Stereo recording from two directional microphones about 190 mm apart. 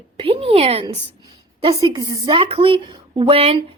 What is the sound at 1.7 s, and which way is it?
Speech, 20° right (ahead or behind).